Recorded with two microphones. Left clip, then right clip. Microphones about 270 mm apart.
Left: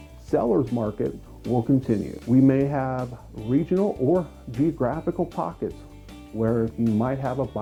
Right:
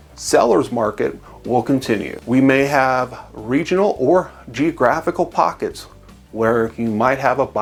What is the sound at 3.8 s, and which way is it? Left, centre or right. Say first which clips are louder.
Speech: right 11 dB; right.